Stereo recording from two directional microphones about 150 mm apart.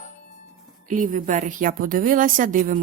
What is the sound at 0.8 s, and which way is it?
A woman's voice, 60° right (ahead or behind).